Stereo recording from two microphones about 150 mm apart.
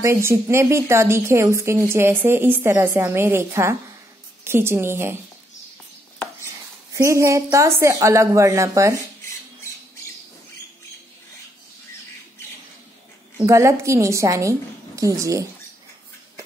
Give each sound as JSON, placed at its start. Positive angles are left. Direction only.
{"t": 0.0, "sound": "a woman's voice", "side_deg": -20}
{"t": 6.4, "sound": "a sound", "side_deg": -20}
{"t": 7.4, "sound": "a woman's voice", "side_deg": -20}
{"t": 13.5, "sound": "a woman's voice", "side_deg": -20}